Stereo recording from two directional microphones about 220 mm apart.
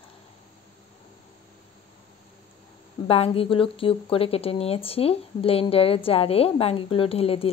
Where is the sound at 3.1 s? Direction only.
25° left (ahead or behind).